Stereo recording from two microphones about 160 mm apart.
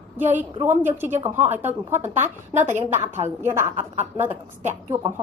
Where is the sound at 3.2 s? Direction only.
15° right (ahead or behind).